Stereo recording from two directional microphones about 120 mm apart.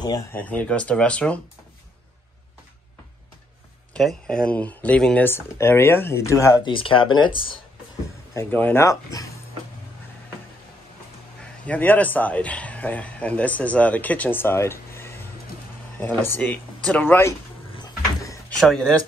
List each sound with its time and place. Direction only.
0.3 s speech: 15° left (ahead or behind)
3.9 s speech: 5° left (ahead or behind); by 6.6 s 25° left (ahead or behind)
6.6 s speech: 45° left (ahead or behind)
8.4 s speech: 15° left (ahead or behind)
11.6 s speech: 15° left (ahead or behind)
18.6 s speech: 5° left (ahead or behind)